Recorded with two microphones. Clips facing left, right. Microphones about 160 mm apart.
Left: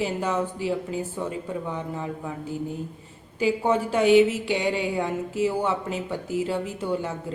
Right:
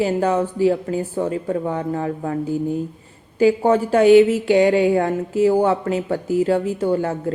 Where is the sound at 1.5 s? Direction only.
60° right (ahead or behind).